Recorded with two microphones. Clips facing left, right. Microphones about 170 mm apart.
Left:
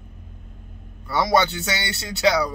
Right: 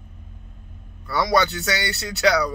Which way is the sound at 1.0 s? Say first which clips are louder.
Left 1 dB; 20° left (ahead or behind).